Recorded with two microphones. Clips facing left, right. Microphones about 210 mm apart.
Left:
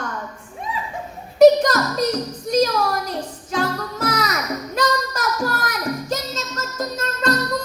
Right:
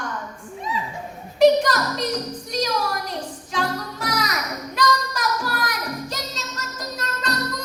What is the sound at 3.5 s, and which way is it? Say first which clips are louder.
Music: left 3 dB; 45° left (ahead or behind).